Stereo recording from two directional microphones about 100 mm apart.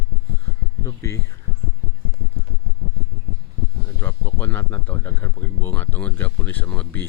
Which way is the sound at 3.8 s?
25° left (ahead or behind).